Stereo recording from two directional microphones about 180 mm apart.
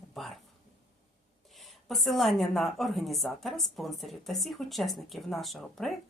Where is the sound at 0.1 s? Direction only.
Centre (ahead or behind).